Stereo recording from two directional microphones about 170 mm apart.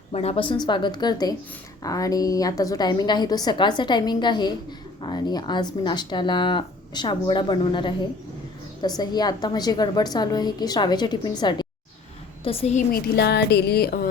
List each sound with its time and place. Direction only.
0.1 s speech: 40° left (ahead or behind)
12.5 s a woman's voice: 35° left (ahead or behind)
12.9 s speech: 70° left (ahead or behind)